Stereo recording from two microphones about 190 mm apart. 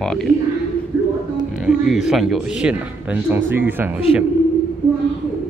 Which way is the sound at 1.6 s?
Centre (ahead or behind).